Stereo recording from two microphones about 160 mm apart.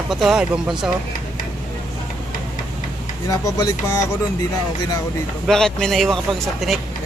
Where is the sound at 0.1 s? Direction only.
5° right (ahead or behind).